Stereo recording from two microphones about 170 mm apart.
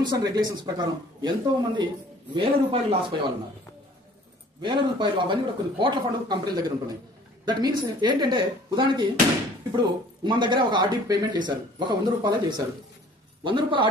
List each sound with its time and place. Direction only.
0.0 s a man's voice: 25° right (ahead or behind)
4.6 s speech: 25° right (ahead or behind)